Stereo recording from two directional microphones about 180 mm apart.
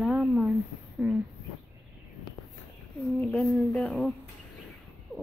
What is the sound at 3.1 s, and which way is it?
Music, 10° left (ahead or behind).